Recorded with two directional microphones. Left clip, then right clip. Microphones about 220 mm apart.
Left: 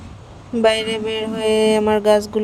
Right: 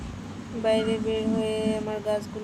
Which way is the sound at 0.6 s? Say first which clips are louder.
Left 7 dB; 45° left (ahead or behind).